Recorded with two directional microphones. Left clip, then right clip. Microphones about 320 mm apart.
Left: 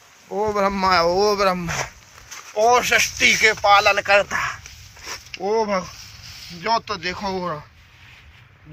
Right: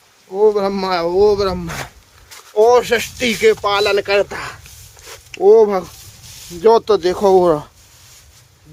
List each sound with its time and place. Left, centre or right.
0.3 s speech: centre